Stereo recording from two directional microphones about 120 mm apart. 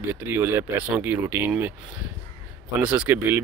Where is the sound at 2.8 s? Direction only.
10° right (ahead or behind).